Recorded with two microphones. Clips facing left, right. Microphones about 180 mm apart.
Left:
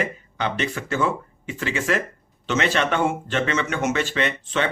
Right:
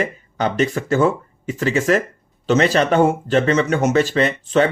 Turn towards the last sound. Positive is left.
turn(degrees=-40)  # may be behind; listen again after turning